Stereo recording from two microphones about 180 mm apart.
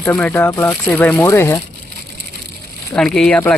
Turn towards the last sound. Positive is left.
turn(degrees=5)  # may be behind; listen again after turning